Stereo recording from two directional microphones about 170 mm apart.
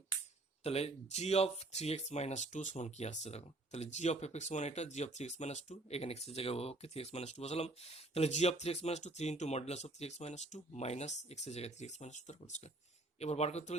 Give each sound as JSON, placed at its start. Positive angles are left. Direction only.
{"t": 0.6, "sound": "speech", "side_deg": 40}